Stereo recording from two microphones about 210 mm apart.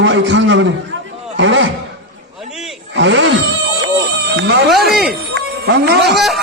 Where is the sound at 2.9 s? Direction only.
60° right (ahead or behind).